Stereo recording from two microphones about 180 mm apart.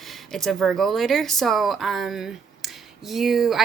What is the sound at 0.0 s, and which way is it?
Speech, centre (ahead or behind).